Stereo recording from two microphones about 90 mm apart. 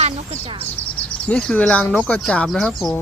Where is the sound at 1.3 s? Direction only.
10° left (ahead or behind).